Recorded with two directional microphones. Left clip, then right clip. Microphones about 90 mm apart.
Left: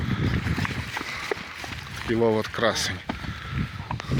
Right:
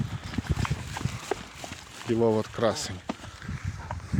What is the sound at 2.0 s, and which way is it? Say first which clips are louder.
Speech: left 2 dB; 10° right (ahead or behind).